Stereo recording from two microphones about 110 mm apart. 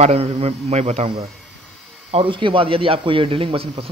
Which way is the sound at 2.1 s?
50° right (ahead or behind).